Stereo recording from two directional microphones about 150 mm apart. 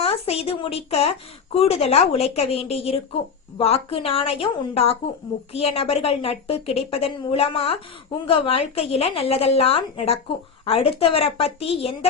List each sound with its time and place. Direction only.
0.0 s a woman's voice: 40° left (ahead or behind)